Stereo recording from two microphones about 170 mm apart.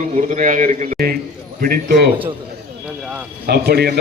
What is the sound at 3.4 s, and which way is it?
Speech, 70° right (ahead or behind).